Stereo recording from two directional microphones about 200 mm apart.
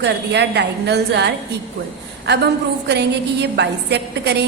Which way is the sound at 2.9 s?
60° right (ahead or behind).